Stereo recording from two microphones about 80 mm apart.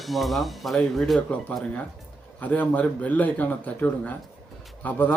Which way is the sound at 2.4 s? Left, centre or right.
Centre.